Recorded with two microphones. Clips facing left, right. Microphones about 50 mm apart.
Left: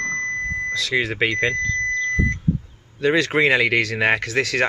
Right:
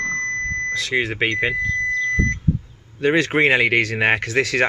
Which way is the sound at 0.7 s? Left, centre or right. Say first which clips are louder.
Left 1 dB; right.